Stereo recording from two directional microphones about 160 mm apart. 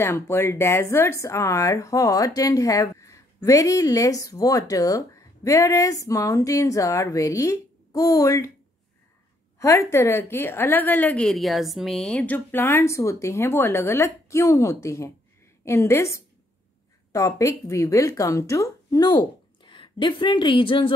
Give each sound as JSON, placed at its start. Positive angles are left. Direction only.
{"t": 0.0, "sound": "speech", "side_deg": 15}
{"t": 9.6, "sound": "a woman's voice", "side_deg": 20}